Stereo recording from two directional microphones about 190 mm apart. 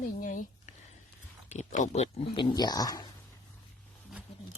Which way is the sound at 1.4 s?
40° left (ahead or behind).